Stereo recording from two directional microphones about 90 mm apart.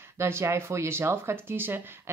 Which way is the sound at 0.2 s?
30° right (ahead or behind).